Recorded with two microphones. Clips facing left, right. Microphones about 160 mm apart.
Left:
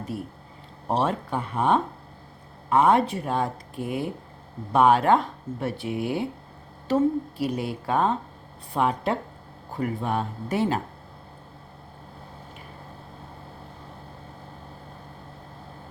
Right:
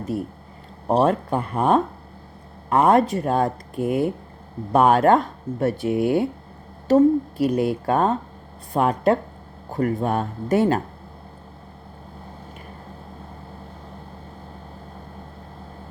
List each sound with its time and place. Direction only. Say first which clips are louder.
0.1 s speech: right 7 dB; 45° right (ahead or behind)